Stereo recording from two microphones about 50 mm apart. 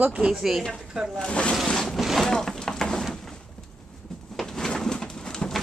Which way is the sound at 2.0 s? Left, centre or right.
Centre.